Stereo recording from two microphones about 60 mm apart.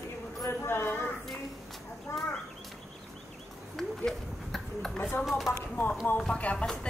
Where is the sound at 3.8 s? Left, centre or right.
Centre.